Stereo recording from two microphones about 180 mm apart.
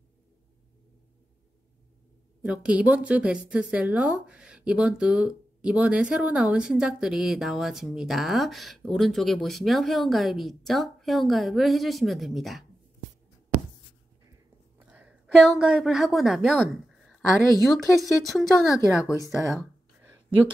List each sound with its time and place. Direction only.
2.4 s a woman's voice: 5° right (ahead or behind)
14.9 s a woman's voice: 5° right (ahead or behind)
19.0 s speech: 20° left (ahead or behind)
19.3 s a sound: 5° right (ahead or behind)